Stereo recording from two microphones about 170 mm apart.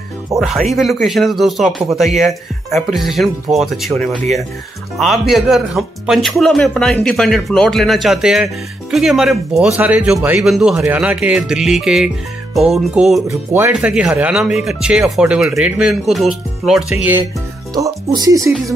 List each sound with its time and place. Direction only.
0.4 s speech: centre (ahead or behind)
13.3 s speech: 15° right (ahead or behind)
17.7 s speech: 20° right (ahead or behind)